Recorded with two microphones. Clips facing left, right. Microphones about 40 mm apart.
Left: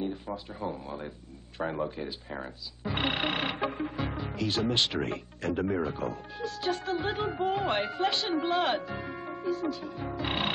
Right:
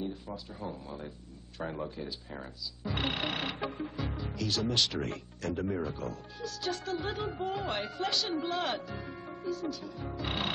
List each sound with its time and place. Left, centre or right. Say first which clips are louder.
0.0 s speech: left 4 dB; left